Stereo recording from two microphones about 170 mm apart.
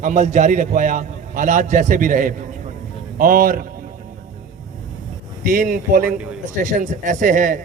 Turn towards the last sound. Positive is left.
turn(degrees=-50)  # may be behind; listen again after turning